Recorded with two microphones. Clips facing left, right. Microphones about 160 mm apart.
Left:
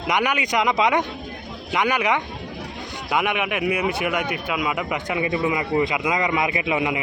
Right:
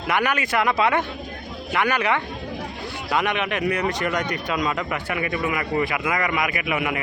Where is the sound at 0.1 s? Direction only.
15° left (ahead or behind).